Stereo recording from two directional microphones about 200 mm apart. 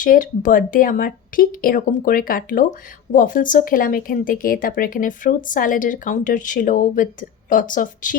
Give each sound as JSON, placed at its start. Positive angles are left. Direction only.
{"t": 0.0, "sound": "speech", "side_deg": 40}